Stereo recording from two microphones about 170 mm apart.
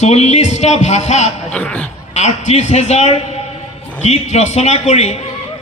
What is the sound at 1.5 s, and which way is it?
Speech, 5° left (ahead or behind).